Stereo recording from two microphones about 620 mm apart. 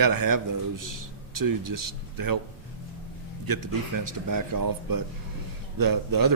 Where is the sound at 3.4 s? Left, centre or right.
Right.